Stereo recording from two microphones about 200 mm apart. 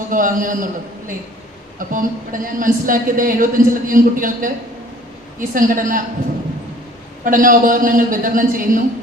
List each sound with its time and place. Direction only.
0.1 s a man's voice: 40° right (ahead or behind)
7.3 s speech: 45° right (ahead or behind)